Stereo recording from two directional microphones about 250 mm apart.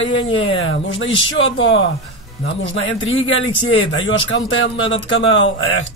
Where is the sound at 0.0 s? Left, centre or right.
Left.